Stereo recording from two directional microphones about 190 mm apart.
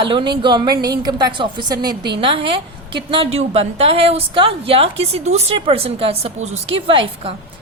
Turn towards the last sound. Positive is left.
turn(degrees=-30)  # may be behind; listen again after turning